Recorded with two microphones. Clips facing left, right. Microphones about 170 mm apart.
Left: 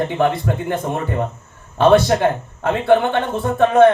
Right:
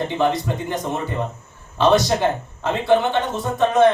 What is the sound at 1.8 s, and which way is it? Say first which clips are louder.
Speech: left 4 dB; 55° left (ahead or behind).